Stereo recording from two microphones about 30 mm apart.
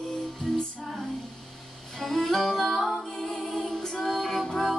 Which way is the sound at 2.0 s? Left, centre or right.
Centre.